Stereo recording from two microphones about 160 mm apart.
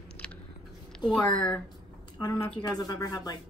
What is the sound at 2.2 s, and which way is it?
Speech, 20° left (ahead or behind).